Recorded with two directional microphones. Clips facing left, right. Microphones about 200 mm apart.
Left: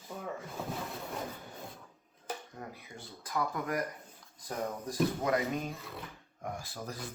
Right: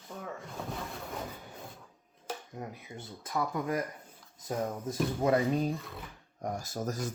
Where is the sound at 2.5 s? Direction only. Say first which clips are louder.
Right 4 dB; 20° right (ahead or behind).